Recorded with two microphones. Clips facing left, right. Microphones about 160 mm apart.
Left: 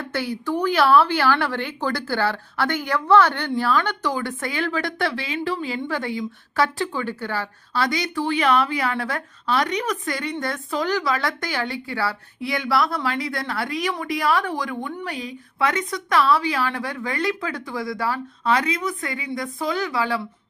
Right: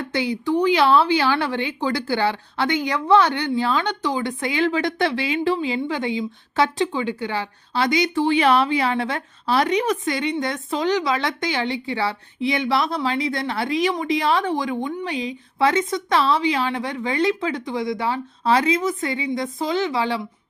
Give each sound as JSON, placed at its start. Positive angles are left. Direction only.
{"t": 0.1, "sound": "a woman's voice", "side_deg": -15}